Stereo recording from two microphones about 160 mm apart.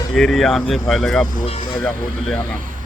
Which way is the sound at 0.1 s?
Centre (ahead or behind).